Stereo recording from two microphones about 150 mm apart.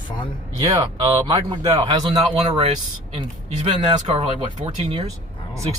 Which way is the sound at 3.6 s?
45° right (ahead or behind).